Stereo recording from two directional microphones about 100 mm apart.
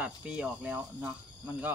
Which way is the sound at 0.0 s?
15° right (ahead or behind).